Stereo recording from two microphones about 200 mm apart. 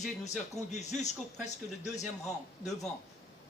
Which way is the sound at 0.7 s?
35° left (ahead or behind).